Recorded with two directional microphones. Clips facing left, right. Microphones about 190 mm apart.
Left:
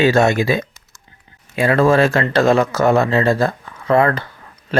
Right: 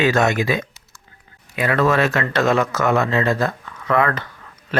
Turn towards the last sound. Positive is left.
turn(degrees=30)  # may be behind; listen again after turning